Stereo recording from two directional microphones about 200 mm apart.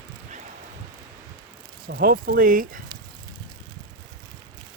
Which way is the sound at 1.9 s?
50° right (ahead or behind).